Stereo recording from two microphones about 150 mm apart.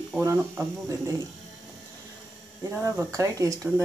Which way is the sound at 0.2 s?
20° right (ahead or behind).